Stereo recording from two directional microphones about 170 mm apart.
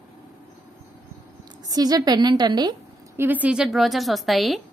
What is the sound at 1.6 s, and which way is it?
A woman's voice, 20° right (ahead or behind).